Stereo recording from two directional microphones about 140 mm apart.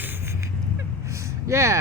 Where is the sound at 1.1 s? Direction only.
20° right (ahead or behind).